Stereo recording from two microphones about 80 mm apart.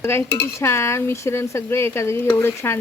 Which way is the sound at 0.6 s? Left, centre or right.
Left.